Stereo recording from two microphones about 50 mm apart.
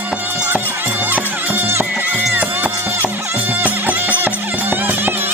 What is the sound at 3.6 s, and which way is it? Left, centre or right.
Music, right.